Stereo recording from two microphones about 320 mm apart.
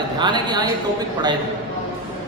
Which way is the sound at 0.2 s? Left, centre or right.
Centre.